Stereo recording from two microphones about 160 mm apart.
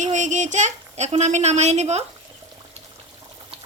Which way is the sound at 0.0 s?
50° right (ahead or behind).